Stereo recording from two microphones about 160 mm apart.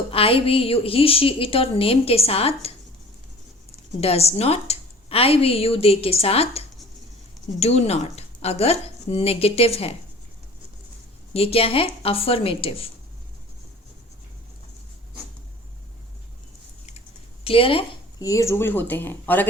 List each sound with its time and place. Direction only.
0.1 s a woman's voice: 35° left (ahead or behind)
4.0 s a woman's voice: 40° left (ahead or behind)
11.3 s a woman's voice: 35° left (ahead or behind)
17.4 s a woman's voice: 35° left (ahead or behind)
18.2 s speech: 20° left (ahead or behind)